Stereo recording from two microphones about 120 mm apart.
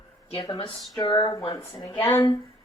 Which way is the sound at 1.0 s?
35° left (ahead or behind).